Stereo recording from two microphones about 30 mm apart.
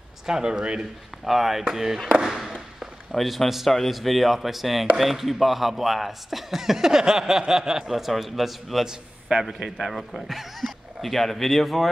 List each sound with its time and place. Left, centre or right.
0.3 s speech: right
1.2 s speech: centre
2.2 s a sound: centre
3.1 s a man's voice: centre
7.9 s speech: centre